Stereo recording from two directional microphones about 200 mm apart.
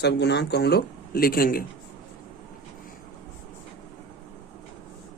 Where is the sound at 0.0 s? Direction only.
60° left (ahead or behind).